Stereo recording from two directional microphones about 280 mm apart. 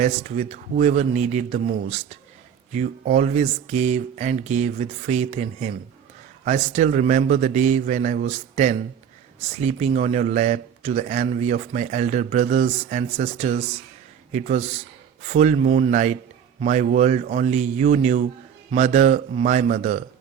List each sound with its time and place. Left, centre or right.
0.0 s a man's voice: right